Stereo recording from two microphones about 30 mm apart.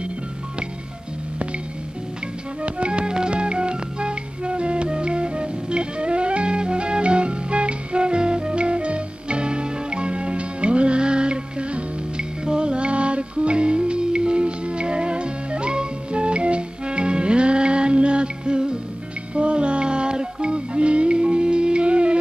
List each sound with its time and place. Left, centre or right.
2.6 s music: right